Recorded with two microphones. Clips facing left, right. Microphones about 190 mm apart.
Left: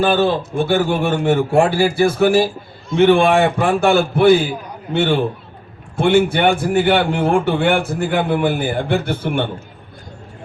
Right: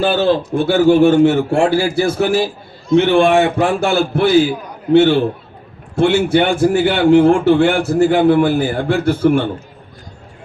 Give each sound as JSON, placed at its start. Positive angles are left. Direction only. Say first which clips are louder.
{"t": 0.0, "sound": "a man's voice", "louder": "right 1 dB", "side_deg": 55}